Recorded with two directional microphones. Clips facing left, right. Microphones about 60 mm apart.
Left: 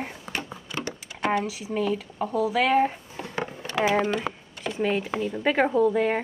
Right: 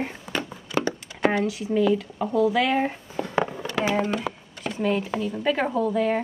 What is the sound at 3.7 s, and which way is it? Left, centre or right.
Speech, left.